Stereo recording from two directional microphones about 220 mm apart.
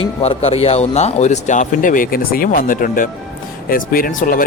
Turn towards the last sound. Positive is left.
turn(degrees=40)  # may be behind; listen again after turning